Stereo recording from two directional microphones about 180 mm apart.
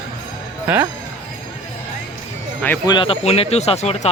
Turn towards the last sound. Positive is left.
turn(degrees=35)  # may be behind; listen again after turning